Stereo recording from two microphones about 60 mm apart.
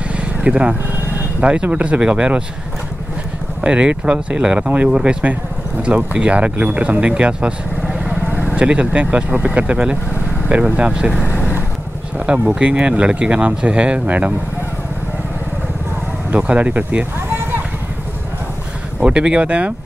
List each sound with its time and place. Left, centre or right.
0.1 s vehicle: centre
1.4 s speech: centre
3.6 s speech: centre
8.1 s vehicle: right
8.5 s speech: right
12.3 s speech: centre
16.3 s speech: right
18.9 s speech: centre